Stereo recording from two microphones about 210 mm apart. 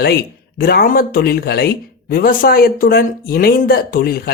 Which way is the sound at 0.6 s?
45° left (ahead or behind).